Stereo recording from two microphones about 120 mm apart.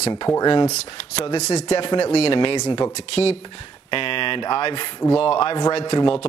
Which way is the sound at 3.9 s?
45° left (ahead or behind).